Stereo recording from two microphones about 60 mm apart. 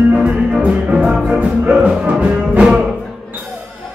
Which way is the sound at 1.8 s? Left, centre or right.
Right.